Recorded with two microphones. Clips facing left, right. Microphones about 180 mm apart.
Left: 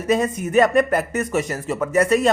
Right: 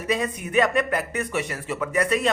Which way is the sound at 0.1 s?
45° left (ahead or behind).